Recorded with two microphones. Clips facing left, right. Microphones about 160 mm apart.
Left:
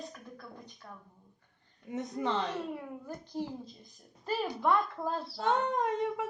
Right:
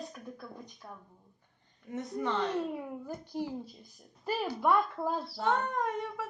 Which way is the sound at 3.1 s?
10° right (ahead or behind).